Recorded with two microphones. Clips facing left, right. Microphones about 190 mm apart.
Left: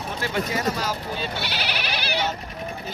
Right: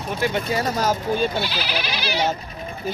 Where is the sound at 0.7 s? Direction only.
45° right (ahead or behind).